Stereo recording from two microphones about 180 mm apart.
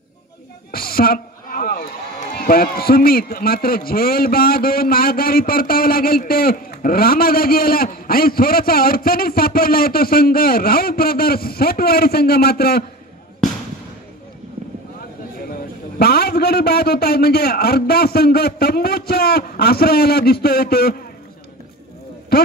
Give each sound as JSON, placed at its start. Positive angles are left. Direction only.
{"t": 0.7, "sound": "a man's voice", "side_deg": 55}
{"t": 15.5, "sound": "a man's voice", "side_deg": 60}
{"t": 22.3, "sound": "speech", "side_deg": 60}